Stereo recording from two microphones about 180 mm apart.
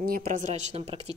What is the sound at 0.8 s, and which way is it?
Speech, 30° right (ahead or behind).